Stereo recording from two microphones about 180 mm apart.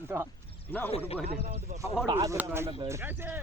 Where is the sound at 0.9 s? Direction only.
35° left (ahead or behind).